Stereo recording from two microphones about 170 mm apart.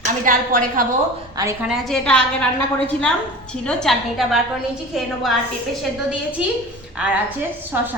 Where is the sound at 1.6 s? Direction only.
Centre (ahead or behind).